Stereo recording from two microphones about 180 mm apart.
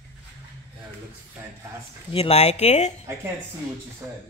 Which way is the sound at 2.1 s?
35° left (ahead or behind).